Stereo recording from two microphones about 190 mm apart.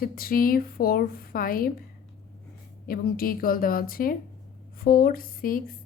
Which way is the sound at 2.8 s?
50° left (ahead or behind).